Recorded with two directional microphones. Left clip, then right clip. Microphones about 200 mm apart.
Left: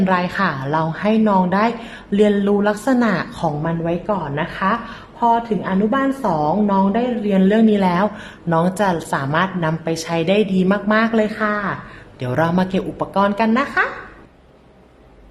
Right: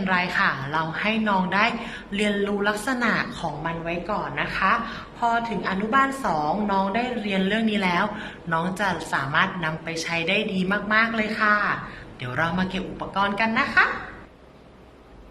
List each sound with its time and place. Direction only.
0.0 s a woman's voice: 45° left (ahead or behind)
11.3 s speech: 30° left (ahead or behind)
12.2 s speech: 45° left (ahead or behind)